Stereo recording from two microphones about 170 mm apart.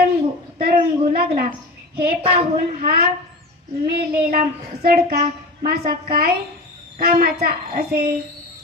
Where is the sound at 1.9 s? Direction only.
60° right (ahead or behind).